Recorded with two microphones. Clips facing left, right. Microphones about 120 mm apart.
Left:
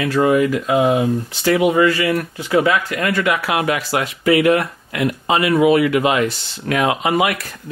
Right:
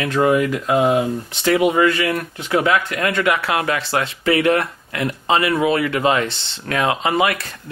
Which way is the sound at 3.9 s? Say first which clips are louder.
Left 3 dB; 30° right (ahead or behind).